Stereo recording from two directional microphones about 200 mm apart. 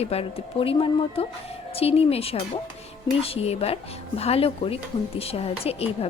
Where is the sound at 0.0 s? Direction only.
30° left (ahead or behind).